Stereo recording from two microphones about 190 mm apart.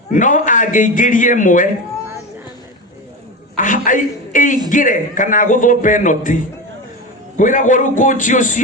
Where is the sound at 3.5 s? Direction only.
45° left (ahead or behind).